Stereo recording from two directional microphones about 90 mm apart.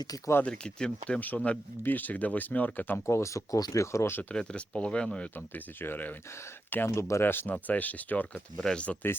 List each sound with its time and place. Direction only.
0.4 s speech: 10° left (ahead or behind); by 4.2 s 30° left (ahead or behind)
4.2 s speech: 15° left (ahead or behind)
8.5 s speech: 5° left (ahead or behind)